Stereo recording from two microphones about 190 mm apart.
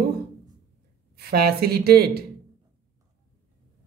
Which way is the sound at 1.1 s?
55° right (ahead or behind).